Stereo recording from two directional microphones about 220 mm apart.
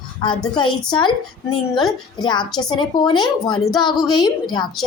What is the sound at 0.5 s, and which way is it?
Speech, 20° left (ahead or behind).